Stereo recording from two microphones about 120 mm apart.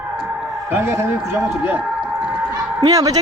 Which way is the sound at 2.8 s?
30° right (ahead or behind).